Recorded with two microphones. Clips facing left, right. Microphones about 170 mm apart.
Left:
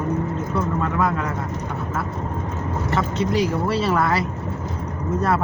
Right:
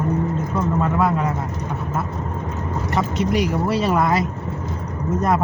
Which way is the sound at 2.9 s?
15° right (ahead or behind).